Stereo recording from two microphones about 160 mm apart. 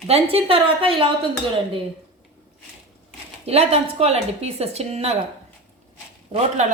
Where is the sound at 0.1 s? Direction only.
35° right (ahead or behind).